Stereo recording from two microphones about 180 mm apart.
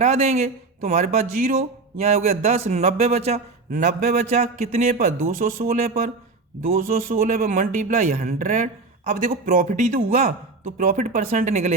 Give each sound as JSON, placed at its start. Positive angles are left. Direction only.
{"t": 0.0, "sound": "speech", "side_deg": -35}
{"t": 4.9, "sound": "speech", "side_deg": -50}